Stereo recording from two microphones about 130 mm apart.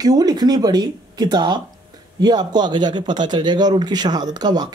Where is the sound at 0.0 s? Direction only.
30° right (ahead or behind).